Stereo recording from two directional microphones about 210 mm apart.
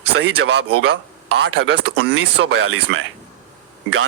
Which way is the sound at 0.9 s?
55° right (ahead or behind).